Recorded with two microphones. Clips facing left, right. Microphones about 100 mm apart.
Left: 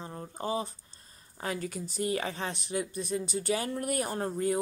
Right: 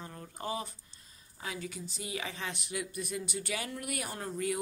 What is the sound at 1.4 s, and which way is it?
Speech, 45° left (ahead or behind).